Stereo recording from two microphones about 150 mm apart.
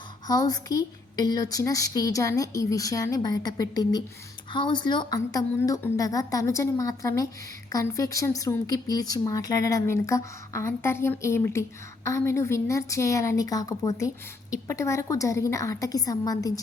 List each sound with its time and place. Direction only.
0.3 s speech: 25° left (ahead or behind)